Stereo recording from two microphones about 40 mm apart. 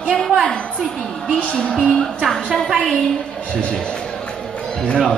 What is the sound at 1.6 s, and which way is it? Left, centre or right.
Speech, left.